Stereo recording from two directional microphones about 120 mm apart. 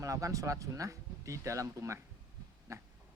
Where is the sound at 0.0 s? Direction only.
25° right (ahead or behind).